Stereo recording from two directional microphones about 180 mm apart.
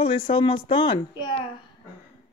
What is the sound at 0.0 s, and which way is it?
Speech, 30° left (ahead or behind).